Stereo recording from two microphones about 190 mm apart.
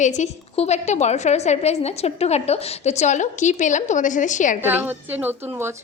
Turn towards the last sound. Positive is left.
turn(degrees=-10)  # may be behind; listen again after turning